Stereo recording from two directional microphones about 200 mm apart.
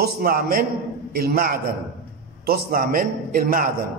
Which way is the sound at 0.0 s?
50° right (ahead or behind).